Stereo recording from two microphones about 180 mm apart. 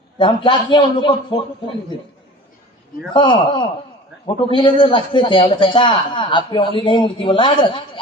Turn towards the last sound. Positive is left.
turn(degrees=25)  # may be behind; listen again after turning